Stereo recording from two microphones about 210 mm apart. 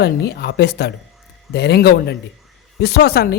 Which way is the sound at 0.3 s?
50° left (ahead or behind).